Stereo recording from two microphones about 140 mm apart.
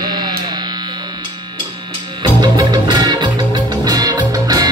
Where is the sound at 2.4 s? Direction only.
30° right (ahead or behind).